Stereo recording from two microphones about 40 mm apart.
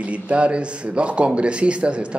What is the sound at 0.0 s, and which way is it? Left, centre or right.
Speech, right.